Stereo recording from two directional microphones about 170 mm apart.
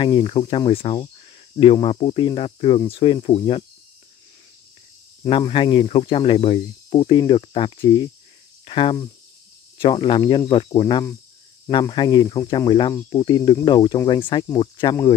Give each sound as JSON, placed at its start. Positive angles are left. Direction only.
{"t": 0.0, "sound": "speech", "side_deg": 30}
{"t": 5.2, "sound": "speech", "side_deg": 25}